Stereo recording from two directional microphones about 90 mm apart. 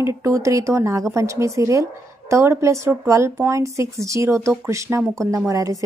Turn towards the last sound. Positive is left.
turn(degrees=-40)  # may be behind; listen again after turning